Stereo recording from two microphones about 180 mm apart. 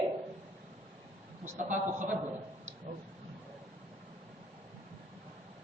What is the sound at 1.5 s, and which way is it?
Speech, 40° right (ahead or behind).